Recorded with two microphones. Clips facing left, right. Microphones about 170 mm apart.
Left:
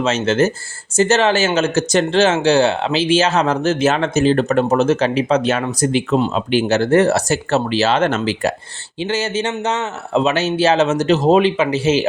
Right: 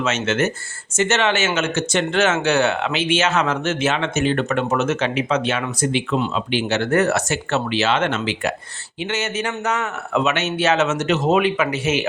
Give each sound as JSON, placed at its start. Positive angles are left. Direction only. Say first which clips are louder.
{"t": 0.0, "sound": "speech", "louder": "left 5 dB", "side_deg": 35}